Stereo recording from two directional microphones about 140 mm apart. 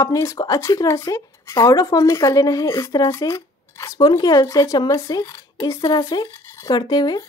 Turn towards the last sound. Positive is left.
turn(degrees=30)  # may be behind; listen again after turning